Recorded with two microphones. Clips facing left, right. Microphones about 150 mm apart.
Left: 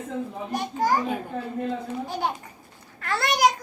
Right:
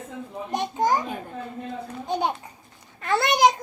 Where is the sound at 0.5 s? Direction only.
20° right (ahead or behind).